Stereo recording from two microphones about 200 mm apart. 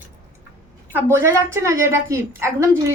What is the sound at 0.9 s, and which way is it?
A woman's voice, 10° right (ahead or behind).